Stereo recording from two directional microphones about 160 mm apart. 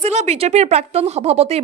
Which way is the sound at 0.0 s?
40° right (ahead or behind).